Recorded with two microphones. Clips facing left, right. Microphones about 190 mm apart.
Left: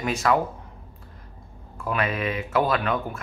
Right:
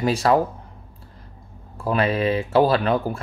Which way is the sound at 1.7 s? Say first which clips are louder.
Right 5 dB; 30° right (ahead or behind).